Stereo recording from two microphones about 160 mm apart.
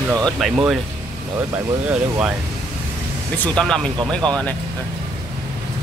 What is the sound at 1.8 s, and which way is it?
Speech, 5° right (ahead or behind).